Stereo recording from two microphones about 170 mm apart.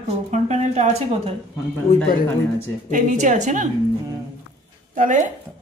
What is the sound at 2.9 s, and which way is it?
Speech, 45° right (ahead or behind).